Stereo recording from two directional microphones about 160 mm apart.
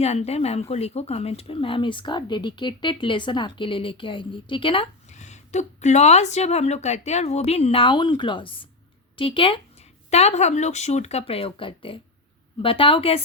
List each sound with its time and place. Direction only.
0.0 s speech: 40° left (ahead or behind)
5.1 s a woman's voice: 45° left (ahead or behind)